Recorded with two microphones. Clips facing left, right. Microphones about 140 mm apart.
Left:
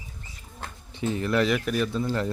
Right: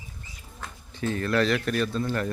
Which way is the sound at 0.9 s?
20° left (ahead or behind).